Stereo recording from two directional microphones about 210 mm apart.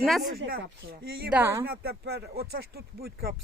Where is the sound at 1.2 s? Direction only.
10° right (ahead or behind).